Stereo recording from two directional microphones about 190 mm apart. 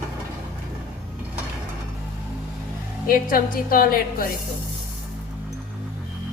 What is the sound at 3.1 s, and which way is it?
Music, 50° left (ahead or behind).